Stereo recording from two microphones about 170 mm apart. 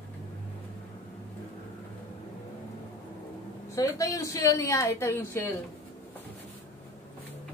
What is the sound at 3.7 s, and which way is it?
Speech, 20° left (ahead or behind).